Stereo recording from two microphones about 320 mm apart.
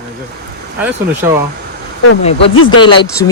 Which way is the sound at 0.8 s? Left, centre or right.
Centre.